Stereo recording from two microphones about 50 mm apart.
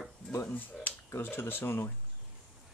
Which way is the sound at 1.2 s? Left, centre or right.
Left.